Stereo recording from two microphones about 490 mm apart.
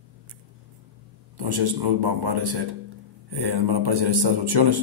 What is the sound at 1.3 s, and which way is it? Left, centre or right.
A man's voice, right.